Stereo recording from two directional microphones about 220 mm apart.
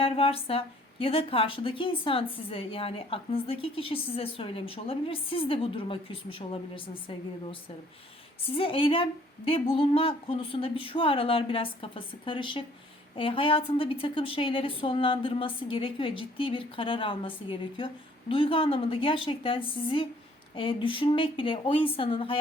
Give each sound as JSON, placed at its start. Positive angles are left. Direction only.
{"t": 0.0, "sound": "speech", "side_deg": 25}
{"t": 8.4, "sound": "speech", "side_deg": 25}